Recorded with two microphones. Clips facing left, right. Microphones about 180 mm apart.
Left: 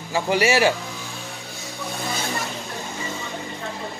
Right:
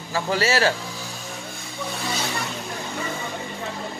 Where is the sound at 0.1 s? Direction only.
15° left (ahead or behind).